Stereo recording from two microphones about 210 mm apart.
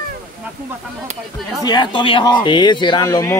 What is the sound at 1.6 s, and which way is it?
Speech, 20° left (ahead or behind).